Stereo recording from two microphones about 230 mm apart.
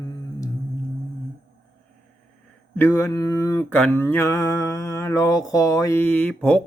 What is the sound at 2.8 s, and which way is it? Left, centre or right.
Mantra, centre.